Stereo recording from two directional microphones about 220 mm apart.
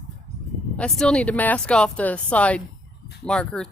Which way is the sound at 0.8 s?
5° left (ahead or behind).